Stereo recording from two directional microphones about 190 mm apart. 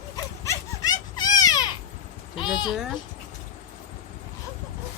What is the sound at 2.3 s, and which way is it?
Sheep, 25° left (ahead or behind).